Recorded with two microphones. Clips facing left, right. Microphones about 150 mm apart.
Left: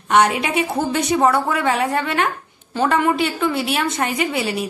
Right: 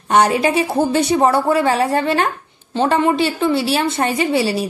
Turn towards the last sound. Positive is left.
turn(degrees=-30)  # may be behind; listen again after turning